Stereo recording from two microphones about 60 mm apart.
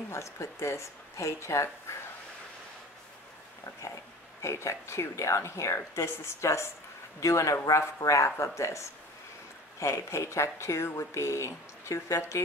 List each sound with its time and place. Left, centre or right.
0.1 s speech: left
4.4 s speech: left